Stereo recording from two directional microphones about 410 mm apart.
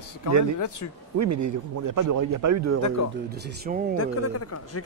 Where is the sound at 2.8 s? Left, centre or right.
Left.